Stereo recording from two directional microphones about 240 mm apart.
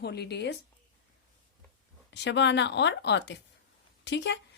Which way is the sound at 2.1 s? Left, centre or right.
Left.